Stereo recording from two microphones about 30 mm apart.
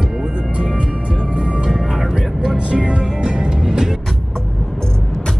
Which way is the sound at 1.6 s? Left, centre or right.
Right.